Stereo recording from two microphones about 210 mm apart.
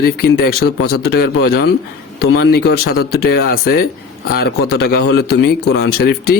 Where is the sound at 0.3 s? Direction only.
50° left (ahead or behind).